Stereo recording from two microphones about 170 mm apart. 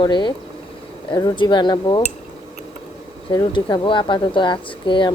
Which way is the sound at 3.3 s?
25° left (ahead or behind).